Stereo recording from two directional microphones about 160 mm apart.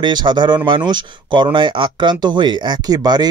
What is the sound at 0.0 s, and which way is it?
Speech, 25° right (ahead or behind).